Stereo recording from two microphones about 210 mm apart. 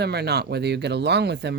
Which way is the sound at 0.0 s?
50° right (ahead or behind).